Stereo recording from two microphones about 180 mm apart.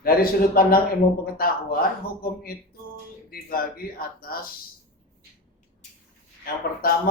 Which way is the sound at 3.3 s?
55° left (ahead or behind).